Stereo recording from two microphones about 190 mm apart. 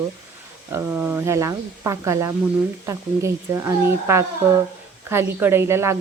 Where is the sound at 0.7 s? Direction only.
10° right (ahead or behind).